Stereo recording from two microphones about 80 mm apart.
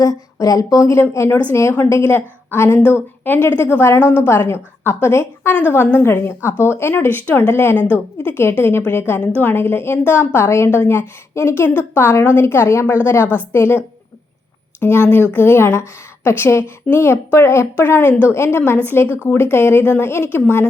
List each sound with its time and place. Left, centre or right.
0.0 s speech: left
0.9 s a woman's voice: left
13.2 s a woman's voice: right
13.5 s a woman's voice: left
19.0 s a woman's voice: right
19.3 s speech: left